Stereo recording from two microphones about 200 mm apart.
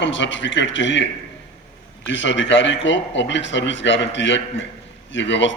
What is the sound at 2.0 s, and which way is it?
A man's voice, 65° left (ahead or behind).